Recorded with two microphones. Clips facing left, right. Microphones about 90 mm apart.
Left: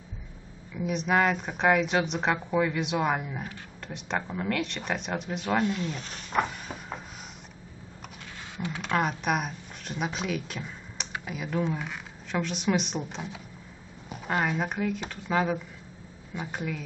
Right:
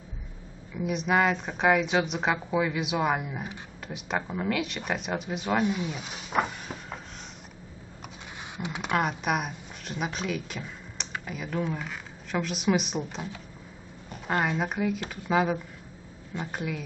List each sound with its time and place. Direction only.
0.7 s speech: centre (ahead or behind)
5.6 s speech: 15° right (ahead or behind)
8.5 s speech: 15° right (ahead or behind)
8.9 s speech: 5° right (ahead or behind)